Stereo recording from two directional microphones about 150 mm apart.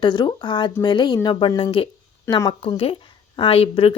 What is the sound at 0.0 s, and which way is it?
A woman's voice, 30° left (ahead or behind).